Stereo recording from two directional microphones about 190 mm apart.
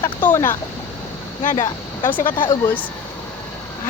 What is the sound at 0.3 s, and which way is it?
Speech, 15° left (ahead or behind).